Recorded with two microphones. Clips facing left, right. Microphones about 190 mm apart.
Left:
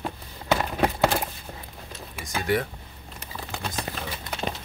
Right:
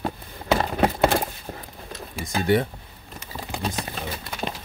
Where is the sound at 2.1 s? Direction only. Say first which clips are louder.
Right 4 dB; 30° right (ahead or behind).